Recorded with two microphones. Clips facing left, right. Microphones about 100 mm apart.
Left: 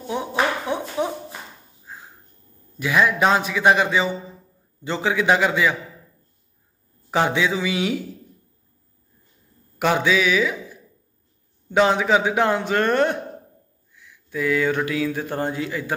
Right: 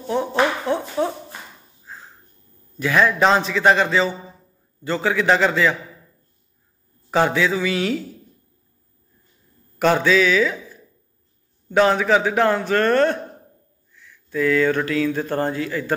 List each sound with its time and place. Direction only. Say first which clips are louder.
0.1 s a sound: right 3 dB; 10° left (ahead or behind)
2.8 s a man's voice: right 2 dB; 15° left (ahead or behind)
7.1 s a man's voice: right 2 dB; 15° left (ahead or behind)
9.8 s a man's voice: right 3 dB; 15° left (ahead or behind)